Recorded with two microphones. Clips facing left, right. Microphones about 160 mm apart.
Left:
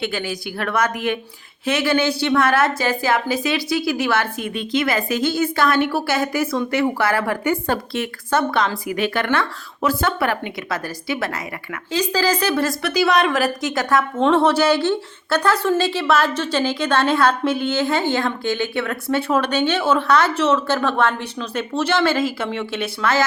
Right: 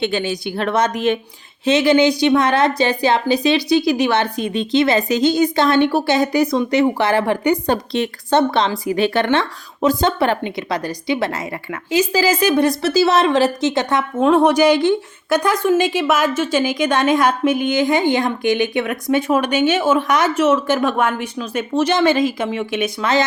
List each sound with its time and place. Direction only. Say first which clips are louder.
0.0 s a woman's voice: right 5 dB; 25° right (ahead or behind)
11.9 s a woman's voice: right 3 dB; 10° right (ahead or behind)
14.2 s a woman's voice: right 4 dB; 10° right (ahead or behind)